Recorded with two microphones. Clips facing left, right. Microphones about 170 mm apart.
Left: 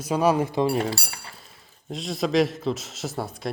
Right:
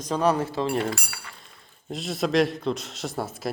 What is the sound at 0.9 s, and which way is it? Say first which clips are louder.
Speech: even; 35° left (ahead or behind).